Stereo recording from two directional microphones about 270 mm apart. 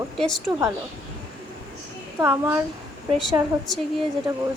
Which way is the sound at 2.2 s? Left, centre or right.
Centre.